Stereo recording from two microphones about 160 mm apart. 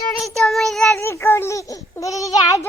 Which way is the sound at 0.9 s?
15° left (ahead or behind).